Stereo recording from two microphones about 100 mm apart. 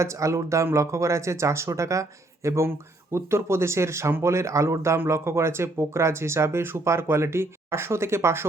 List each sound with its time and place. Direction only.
0.0 s speech: 30° right (ahead or behind)